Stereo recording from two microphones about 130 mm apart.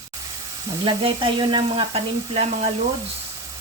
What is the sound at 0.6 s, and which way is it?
Speech, 40° right (ahead or behind).